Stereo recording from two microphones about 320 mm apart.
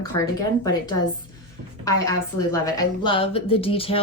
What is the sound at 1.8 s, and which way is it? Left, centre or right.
A woman's voice, centre.